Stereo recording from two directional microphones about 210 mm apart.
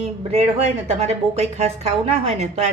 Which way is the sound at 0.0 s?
30° right (ahead or behind).